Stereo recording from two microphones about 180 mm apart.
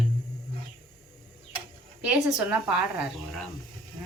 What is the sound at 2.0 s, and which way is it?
Speech, 5° right (ahead or behind).